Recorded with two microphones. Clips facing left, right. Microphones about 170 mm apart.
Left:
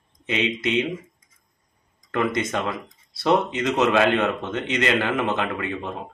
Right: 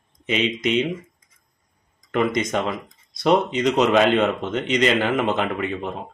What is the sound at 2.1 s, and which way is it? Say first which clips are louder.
A man's voice: right 2 dB; 15° right (ahead or behind).